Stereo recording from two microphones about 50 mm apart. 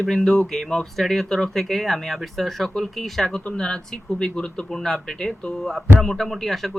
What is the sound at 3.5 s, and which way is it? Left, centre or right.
Speech, centre.